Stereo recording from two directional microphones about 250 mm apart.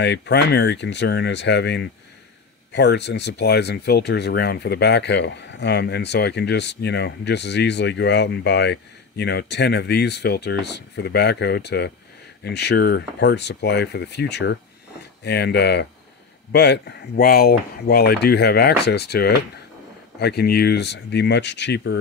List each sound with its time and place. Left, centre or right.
0.0 s speech: left